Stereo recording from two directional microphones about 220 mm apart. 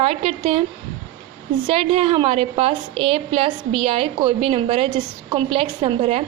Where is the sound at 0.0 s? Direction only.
25° right (ahead or behind).